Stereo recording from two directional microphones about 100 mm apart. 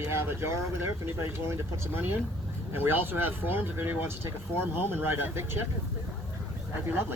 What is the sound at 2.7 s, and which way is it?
Speech, 20° right (ahead or behind).